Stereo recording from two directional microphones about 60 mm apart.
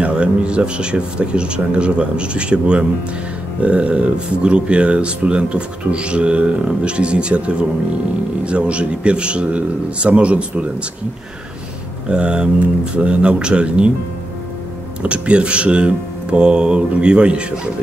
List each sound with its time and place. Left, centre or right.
0.0 s speech: centre
12.1 s speech: centre
15.0 s speech: centre